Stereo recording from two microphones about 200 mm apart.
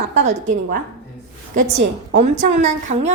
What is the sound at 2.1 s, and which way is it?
A woman's voice, 40° right (ahead or behind).